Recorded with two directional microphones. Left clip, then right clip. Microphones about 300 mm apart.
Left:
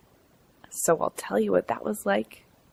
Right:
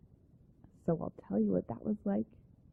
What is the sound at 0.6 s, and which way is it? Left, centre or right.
Speech, centre.